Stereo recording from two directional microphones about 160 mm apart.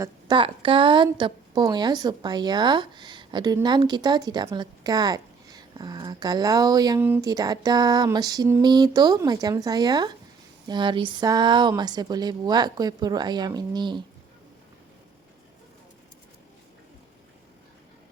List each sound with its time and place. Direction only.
0.0 s a woman's voice: 30° right (ahead or behind)